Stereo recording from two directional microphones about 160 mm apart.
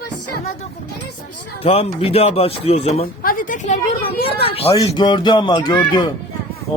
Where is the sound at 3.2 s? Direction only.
60° left (ahead or behind); by 5.8 s 30° left (ahead or behind).